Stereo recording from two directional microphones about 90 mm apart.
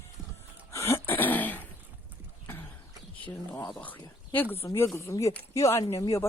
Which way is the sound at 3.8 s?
20° left (ahead or behind).